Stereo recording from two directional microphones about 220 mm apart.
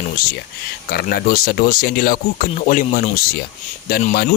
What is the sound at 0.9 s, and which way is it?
Speech, 45° left (ahead or behind).